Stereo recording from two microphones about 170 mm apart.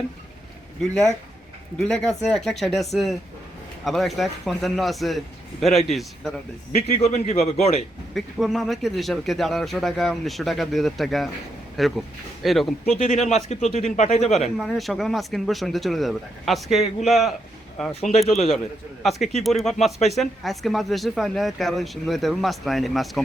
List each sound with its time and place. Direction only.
0.8 s speech: centre (ahead or behind)
6.7 s a man's voice: 40° left (ahead or behind)
8.1 s speech: centre (ahead or behind)
13.2 s a man's voice: 40° left (ahead or behind)
14.3 s speech: centre (ahead or behind)